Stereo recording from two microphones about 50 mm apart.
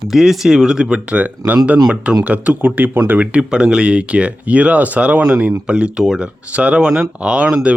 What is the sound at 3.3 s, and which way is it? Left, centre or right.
Speech, centre.